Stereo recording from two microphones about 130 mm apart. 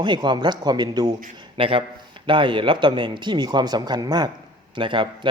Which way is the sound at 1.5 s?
40° right (ahead or behind).